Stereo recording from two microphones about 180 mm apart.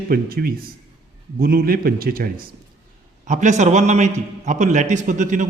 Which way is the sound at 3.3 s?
40° right (ahead or behind).